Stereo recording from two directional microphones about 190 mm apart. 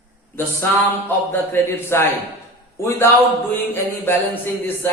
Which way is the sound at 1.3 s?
10° left (ahead or behind).